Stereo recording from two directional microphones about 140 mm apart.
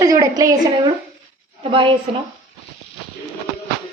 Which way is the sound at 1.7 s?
40° right (ahead or behind).